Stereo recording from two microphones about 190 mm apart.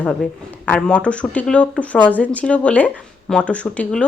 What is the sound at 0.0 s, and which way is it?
A woman's voice, 5° left (ahead or behind).